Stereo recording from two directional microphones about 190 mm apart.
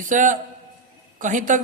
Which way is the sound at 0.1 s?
40° right (ahead or behind).